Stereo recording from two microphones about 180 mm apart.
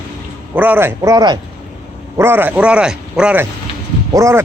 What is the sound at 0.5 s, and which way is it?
Speech, 10° right (ahead or behind).